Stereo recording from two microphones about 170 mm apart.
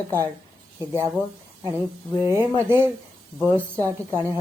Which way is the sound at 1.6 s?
15° right (ahead or behind).